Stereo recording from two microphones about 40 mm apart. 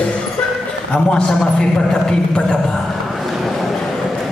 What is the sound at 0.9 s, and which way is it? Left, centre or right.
A man's voice, centre.